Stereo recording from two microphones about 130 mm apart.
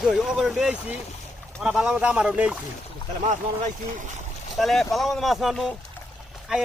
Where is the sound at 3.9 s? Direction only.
75° right (ahead or behind).